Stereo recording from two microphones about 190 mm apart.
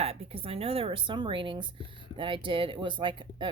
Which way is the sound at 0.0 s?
30° right (ahead or behind).